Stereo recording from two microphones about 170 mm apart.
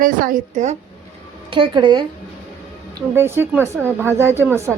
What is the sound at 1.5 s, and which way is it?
Speech, 30° right (ahead or behind).